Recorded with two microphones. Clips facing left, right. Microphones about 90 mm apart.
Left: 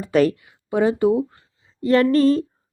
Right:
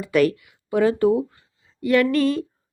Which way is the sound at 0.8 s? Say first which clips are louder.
Even; 20° left (ahead or behind).